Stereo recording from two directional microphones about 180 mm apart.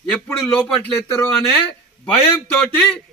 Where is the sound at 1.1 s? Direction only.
15° left (ahead or behind).